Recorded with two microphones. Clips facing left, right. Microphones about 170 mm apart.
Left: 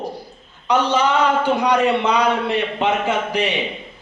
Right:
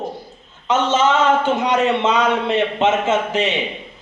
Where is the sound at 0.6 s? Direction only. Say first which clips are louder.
Right 1 dB; 20° right (ahead or behind).